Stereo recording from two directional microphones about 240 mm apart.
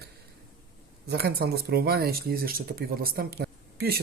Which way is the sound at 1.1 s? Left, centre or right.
Right.